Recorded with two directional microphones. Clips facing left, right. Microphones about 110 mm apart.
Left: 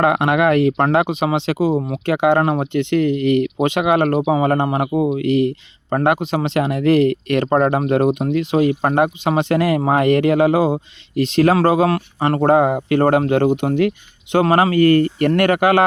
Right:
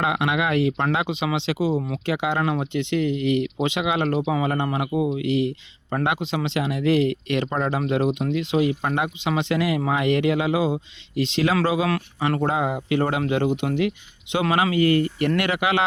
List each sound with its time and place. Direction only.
0.0 s speech: 50° left (ahead or behind)